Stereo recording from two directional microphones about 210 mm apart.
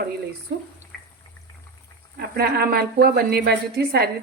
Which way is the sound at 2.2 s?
45° right (ahead or behind).